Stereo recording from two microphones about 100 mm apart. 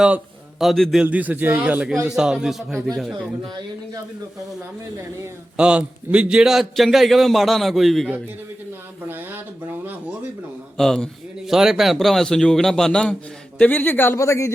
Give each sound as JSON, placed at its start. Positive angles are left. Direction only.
{"t": 0.6, "sound": "a man's voice", "side_deg": 0}
{"t": 1.0, "sound": "a man's voice", "side_deg": -15}
{"t": 3.4, "sound": "speech", "side_deg": -50}
{"t": 5.5, "sound": "a man's voice", "side_deg": -10}
{"t": 9.0, "sound": "speech", "side_deg": -20}
{"t": 10.8, "sound": "a man's voice", "side_deg": 5}
{"t": 13.6, "sound": "speech", "side_deg": 20}